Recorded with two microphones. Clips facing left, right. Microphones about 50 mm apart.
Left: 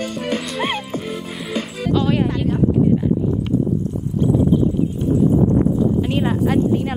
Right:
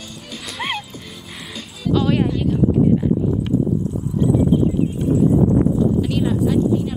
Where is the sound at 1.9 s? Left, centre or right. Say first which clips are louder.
Right 1 dB; centre.